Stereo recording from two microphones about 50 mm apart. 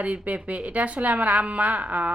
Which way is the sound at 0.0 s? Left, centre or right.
Right.